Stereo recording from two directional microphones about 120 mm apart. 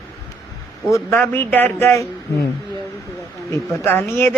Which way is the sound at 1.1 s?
15° left (ahead or behind).